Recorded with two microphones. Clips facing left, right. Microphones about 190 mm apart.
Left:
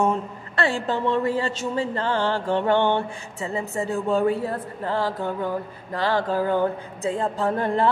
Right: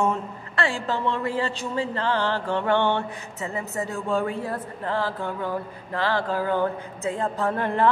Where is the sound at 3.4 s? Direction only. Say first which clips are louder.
Left 3 dB; 30° left (ahead or behind).